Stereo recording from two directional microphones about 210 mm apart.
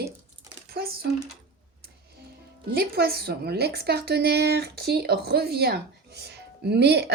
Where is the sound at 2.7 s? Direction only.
45° right (ahead or behind).